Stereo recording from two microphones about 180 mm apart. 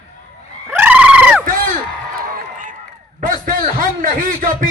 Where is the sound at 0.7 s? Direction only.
10° right (ahead or behind).